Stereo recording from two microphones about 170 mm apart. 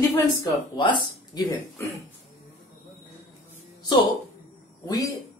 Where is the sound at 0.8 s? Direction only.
25° left (ahead or behind).